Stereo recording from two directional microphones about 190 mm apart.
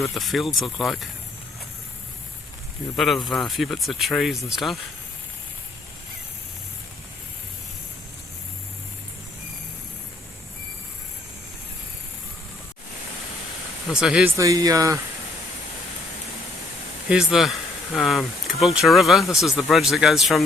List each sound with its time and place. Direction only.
0.0 s speech: centre (ahead or behind)
2.9 s speech: centre (ahead or behind)
13.9 s speech: 5° right (ahead or behind)
14.3 s speech: 20° right (ahead or behind)
17.1 s speech: centre (ahead or behind)